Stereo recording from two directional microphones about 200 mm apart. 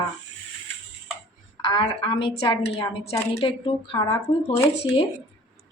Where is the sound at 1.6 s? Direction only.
25° left (ahead or behind).